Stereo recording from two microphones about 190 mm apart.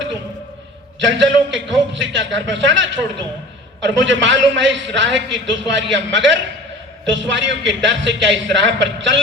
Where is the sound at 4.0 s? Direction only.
75° right (ahead or behind).